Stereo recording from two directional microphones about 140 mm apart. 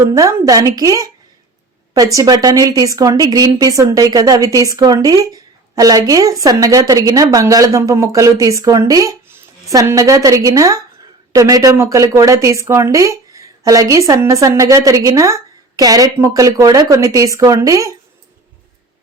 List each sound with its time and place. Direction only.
0.0 s a woman's voice: 25° right (ahead or behind)